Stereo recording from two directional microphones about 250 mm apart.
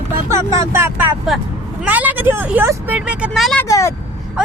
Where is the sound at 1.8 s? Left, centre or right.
Centre.